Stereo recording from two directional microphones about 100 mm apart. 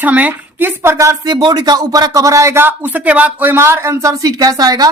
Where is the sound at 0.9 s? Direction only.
30° right (ahead or behind).